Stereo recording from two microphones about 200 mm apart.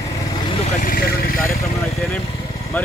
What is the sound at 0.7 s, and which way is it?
Vehicle, 45° left (ahead or behind).